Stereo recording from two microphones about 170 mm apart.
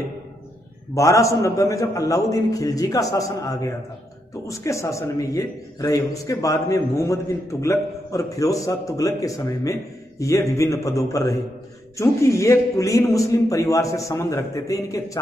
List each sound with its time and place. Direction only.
0.9 s a man's voice: 20° left (ahead or behind)